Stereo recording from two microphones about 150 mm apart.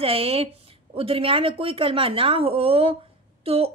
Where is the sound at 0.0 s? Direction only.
40° right (ahead or behind).